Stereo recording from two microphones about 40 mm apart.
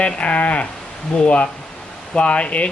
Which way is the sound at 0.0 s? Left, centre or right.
Left.